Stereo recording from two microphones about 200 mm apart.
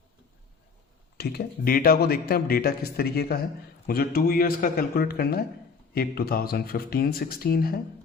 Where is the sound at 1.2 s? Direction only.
55° left (ahead or behind).